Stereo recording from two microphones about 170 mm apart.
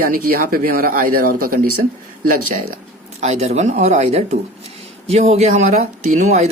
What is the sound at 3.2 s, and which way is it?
Speech, 40° right (ahead or behind).